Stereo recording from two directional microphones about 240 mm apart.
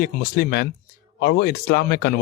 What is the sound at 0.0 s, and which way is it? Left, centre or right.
Speech, left.